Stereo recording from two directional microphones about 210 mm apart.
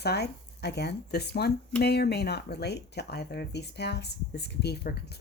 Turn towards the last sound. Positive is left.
turn(degrees=50)  # may be behind; listen again after turning